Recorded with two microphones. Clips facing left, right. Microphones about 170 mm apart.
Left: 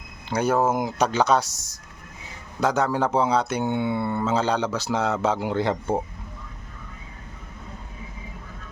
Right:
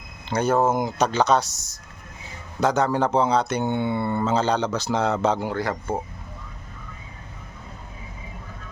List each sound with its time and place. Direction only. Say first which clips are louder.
0.3 s speech: right 1 dB; 10° left (ahead or behind)
5.5 s a man's voice: left 3 dB; 25° left (ahead or behind)